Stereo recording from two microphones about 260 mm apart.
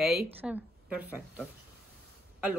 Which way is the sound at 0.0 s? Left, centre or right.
Centre.